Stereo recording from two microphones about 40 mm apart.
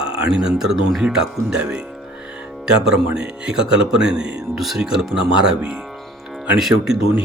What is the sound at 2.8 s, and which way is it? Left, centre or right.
Speech, centre.